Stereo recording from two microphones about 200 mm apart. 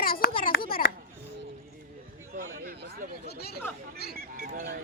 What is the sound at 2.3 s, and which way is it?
Speech, 45° right (ahead or behind).